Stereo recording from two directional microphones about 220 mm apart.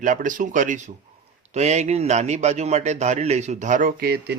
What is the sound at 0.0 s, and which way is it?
A man's voice, 35° right (ahead or behind).